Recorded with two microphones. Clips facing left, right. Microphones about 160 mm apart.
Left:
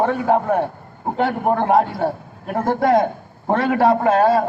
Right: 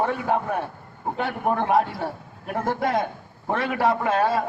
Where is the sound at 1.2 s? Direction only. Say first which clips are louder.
Left 6 dB; 55° left (ahead or behind).